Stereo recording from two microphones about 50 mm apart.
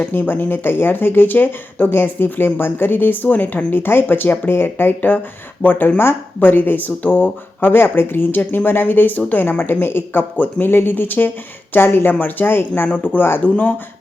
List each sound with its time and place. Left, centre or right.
0.1 s speech: left
3.7 s a woman's voice: left
6.0 s a woman's voice: left
10.3 s a woman's voice: left